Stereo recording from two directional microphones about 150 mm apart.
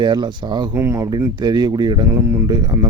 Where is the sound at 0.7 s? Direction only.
20° right (ahead or behind).